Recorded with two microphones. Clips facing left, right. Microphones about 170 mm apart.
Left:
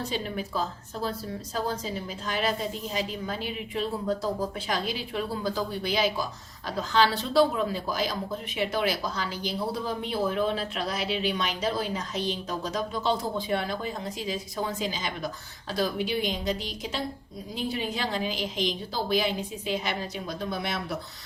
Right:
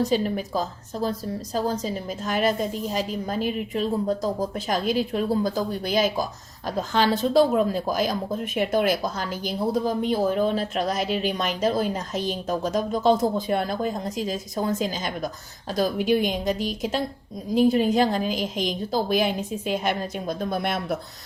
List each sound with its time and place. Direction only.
0.0 s speech: 40° right (ahead or behind)
1.8 s speech: 45° right (ahead or behind)